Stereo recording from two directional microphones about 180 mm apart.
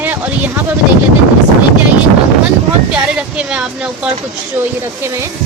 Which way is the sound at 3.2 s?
5° right (ahead or behind).